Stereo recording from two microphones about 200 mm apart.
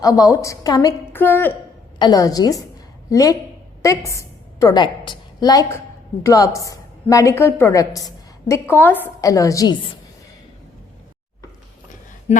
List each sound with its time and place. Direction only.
0.0 s a woman's voice: 15° left (ahead or behind)